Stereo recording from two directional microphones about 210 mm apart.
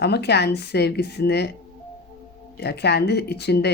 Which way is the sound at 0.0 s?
50° left (ahead or behind).